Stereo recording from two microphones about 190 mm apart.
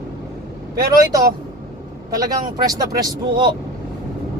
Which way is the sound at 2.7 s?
20° right (ahead or behind).